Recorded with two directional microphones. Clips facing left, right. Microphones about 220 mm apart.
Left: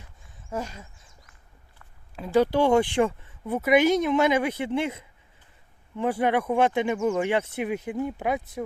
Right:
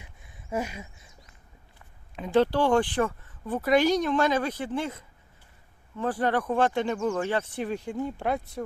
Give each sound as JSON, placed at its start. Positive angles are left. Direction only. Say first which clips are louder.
{"t": 0.5, "sound": "a sound", "louder": "right 2 dB", "side_deg": -10}
{"t": 2.1, "sound": "speech", "louder": "left 1 dB", "side_deg": 5}
{"t": 2.4, "sound": "speech", "louder": "left 2 dB", "side_deg": 20}
{"t": 3.7, "sound": "speech", "louder": "left 2 dB", "side_deg": 20}
{"t": 6.0, "sound": "speech", "louder": "left 3 dB", "side_deg": 10}
{"t": 6.6, "sound": "speech", "louder": "left 2 dB", "side_deg": 20}